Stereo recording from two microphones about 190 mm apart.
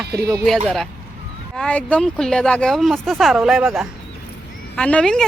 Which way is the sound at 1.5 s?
5° left (ahead or behind).